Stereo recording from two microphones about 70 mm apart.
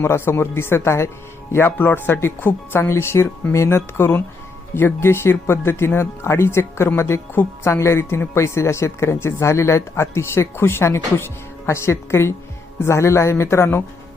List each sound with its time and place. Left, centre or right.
0.0 s speech: left